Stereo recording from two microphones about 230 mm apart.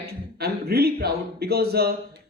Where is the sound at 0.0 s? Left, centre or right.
Right.